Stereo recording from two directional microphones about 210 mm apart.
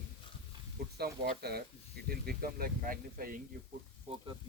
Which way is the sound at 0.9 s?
50° right (ahead or behind).